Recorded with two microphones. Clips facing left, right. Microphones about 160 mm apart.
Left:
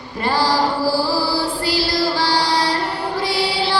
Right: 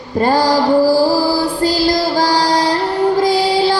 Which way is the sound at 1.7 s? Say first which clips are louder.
Right 5 dB; 45° right (ahead or behind).